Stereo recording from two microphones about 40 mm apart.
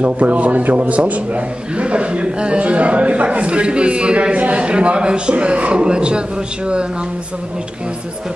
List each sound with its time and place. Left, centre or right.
0.0 s a man's voice: right